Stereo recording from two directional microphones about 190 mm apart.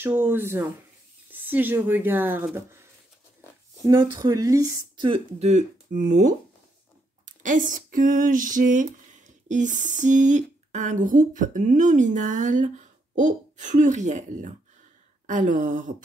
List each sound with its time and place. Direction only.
0.0 s speech: 10° right (ahead or behind); by 15.9 s 40° right (ahead or behind)